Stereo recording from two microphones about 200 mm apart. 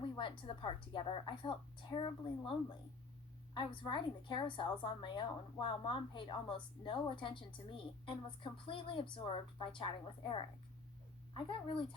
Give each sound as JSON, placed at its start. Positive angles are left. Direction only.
{"t": 0.2, "sound": "a woman's voice", "side_deg": 25}